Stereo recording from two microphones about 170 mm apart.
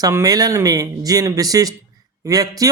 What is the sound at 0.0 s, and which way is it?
Speech, 20° right (ahead or behind).